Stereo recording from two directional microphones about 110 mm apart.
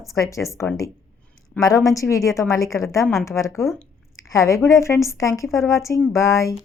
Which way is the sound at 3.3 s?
25° left (ahead or behind).